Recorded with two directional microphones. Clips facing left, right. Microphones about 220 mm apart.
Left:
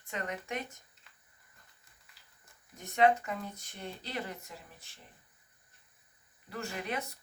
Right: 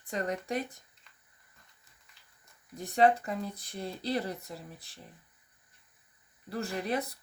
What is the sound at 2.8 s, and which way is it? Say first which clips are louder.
Speech: right 2 dB; 35° right (ahead or behind).